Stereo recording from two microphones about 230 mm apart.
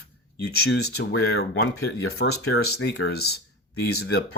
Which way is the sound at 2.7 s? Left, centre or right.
Left.